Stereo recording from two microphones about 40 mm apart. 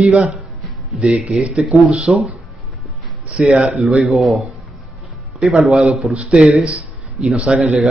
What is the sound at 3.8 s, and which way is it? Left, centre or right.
Speech, centre.